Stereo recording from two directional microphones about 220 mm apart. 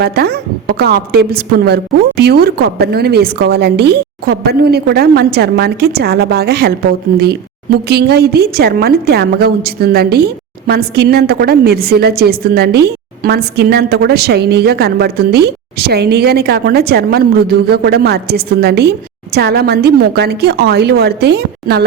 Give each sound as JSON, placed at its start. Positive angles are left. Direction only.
{"t": 0.0, "sound": "a woman's voice", "side_deg": -45}
{"t": 7.9, "sound": "a woman's voice", "side_deg": -45}